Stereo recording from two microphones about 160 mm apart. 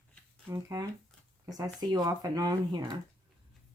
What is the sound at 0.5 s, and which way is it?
Speech, 20° right (ahead or behind).